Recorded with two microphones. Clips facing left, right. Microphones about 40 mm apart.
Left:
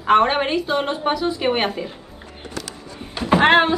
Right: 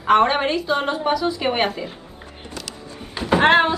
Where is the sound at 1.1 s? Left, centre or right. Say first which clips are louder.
Right 1 dB; left.